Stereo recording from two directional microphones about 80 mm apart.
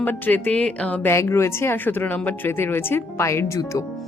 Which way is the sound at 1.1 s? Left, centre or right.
Left.